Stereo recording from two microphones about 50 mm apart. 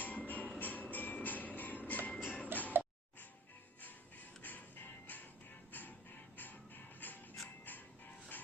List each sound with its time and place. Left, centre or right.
0.0 s music: left
2.5 s music: right
4.4 s music: left